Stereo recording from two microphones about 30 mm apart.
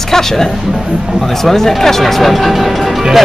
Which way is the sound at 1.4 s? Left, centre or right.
Centre.